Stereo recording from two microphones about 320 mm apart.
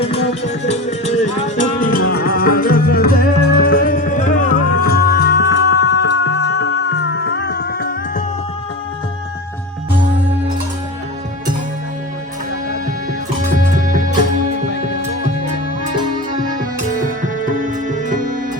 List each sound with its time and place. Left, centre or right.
0.6 s music: left
14.7 s music: left
17.5 s music: right